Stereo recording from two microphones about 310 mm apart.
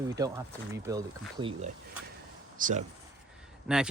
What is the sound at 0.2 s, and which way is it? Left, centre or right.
Speech, centre.